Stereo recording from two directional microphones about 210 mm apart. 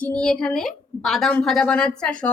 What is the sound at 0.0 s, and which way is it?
A woman's voice, 5° left (ahead or behind).